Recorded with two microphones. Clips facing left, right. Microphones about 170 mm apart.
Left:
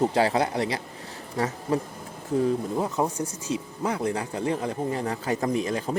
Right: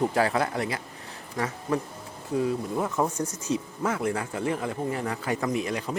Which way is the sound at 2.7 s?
15° left (ahead or behind).